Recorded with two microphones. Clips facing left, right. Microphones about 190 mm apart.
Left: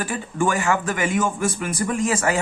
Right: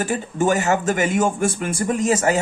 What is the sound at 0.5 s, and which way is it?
A man's voice, 40° right (ahead or behind).